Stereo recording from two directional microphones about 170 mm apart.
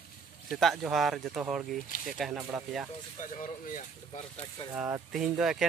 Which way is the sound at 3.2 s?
50° left (ahead or behind).